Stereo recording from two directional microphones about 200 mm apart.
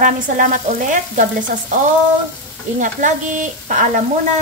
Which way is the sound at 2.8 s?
40° right (ahead or behind).